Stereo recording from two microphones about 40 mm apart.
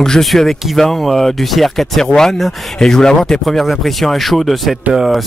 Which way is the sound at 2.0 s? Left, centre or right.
Centre.